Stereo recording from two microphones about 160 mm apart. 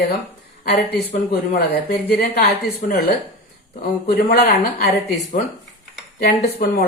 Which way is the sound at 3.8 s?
75° left (ahead or behind).